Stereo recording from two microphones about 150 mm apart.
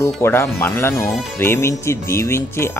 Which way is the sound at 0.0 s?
20° left (ahead or behind).